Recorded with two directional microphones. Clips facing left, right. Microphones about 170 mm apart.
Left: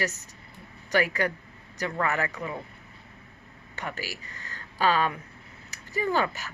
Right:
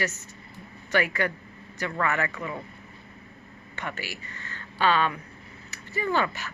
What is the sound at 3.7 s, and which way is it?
Speech, 40° left (ahead or behind).